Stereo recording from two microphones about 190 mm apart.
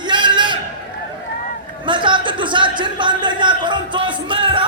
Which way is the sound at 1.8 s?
25° right (ahead or behind).